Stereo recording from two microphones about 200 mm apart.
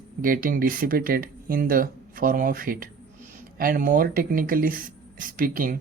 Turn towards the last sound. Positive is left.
turn(degrees=-45)  # may be behind; listen again after turning